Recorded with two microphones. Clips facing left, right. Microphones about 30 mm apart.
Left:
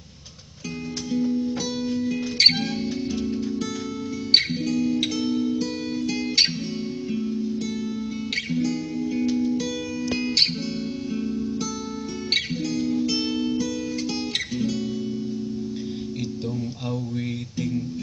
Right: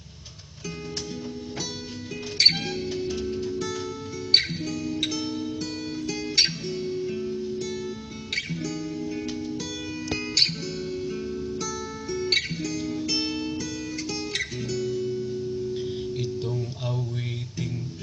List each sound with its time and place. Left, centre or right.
2.3 s music: centre
4.3 s music: centre
5.0 s music: centre
7.1 s music: centre
8.5 s music: centre
12.3 s music: centre